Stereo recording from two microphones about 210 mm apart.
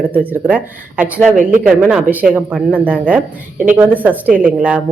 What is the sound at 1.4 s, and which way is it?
Speech, 35° right (ahead or behind).